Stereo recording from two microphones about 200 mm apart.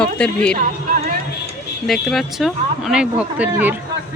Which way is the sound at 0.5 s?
40° right (ahead or behind).